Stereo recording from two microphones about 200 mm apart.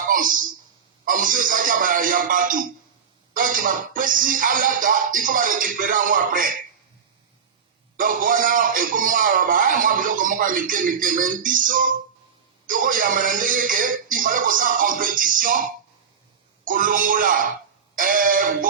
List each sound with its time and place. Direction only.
0.1 s a sound: 45° right (ahead or behind)
1.0 s throat clearing: 45° right (ahead or behind)
3.3 s a man's voice: 45° right (ahead or behind)
7.9 s a man's voice: 45° right (ahead or behind)
16.6 s a man's voice: 45° right (ahead or behind)